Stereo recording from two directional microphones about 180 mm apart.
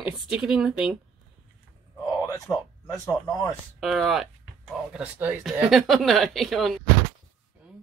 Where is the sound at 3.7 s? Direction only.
Centre (ahead or behind).